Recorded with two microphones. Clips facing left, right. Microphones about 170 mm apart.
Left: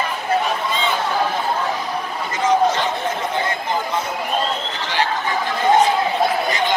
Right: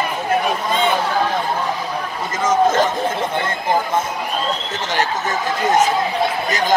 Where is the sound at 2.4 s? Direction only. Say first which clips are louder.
Right 2 dB; 45° right (ahead or behind).